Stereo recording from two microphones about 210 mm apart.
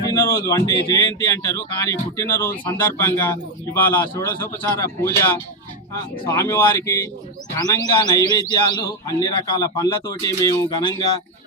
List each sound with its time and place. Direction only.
0.1 s a man's voice: 15° left (ahead or behind)